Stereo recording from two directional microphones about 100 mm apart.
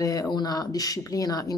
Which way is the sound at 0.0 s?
35° left (ahead or behind).